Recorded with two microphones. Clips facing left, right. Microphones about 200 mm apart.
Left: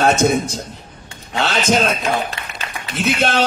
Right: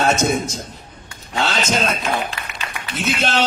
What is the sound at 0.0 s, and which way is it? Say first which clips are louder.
A man's voice: left 3 dB; 55° left (ahead or behind).